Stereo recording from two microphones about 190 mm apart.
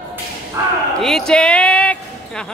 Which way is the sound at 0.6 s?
15° right (ahead or behind).